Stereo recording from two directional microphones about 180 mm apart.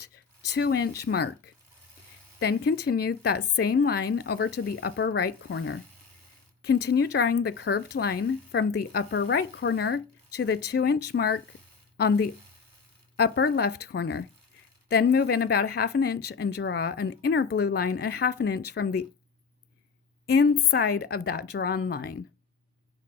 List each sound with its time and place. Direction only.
0.0 s speech: 65° left (ahead or behind)
2.4 s speech: 60° left (ahead or behind); by 5.8 s 90° left
6.6 s speech: 65° left (ahead or behind)
20.3 s speech: 60° left (ahead or behind)